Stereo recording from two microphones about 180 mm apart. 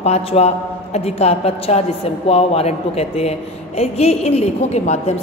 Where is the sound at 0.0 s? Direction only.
35° left (ahead or behind).